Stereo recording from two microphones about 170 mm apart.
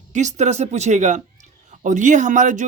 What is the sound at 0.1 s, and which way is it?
Speech, 45° right (ahead or behind).